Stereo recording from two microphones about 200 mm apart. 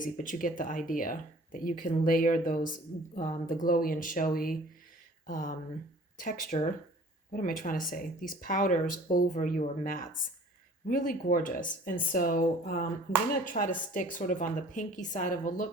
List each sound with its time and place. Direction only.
0.0 s a woman's voice: 40° left (ahead or behind)